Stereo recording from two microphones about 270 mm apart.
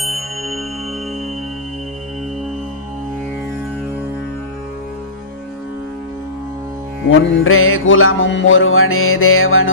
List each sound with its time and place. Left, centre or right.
0.0 s music: centre
7.1 s music: left